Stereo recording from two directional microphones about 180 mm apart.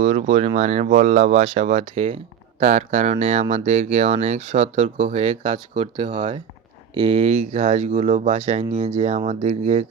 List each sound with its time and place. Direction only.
0.0 s speech: 40° right (ahead or behind)
7.0 s speech: 40° right (ahead or behind)